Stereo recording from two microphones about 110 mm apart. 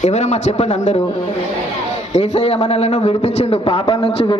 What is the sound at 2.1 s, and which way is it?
A man's voice, 90° left.